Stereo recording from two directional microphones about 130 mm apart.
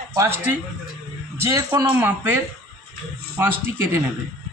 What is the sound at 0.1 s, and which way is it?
A man's voice, 20° right (ahead or behind).